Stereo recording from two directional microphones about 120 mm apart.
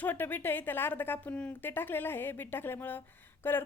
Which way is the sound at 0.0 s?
15° left (ahead or behind).